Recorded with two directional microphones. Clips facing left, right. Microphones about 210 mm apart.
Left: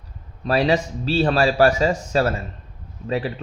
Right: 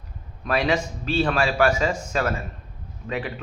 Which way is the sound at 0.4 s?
35° left (ahead or behind).